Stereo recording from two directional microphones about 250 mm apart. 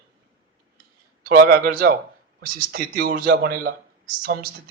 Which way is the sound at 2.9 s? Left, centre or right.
Right.